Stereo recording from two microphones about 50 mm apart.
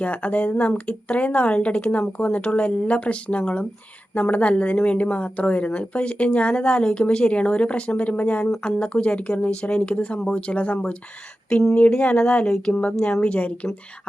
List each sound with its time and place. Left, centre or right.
0.0 s speech: left
8.4 s speech: centre
13.2 s speech: left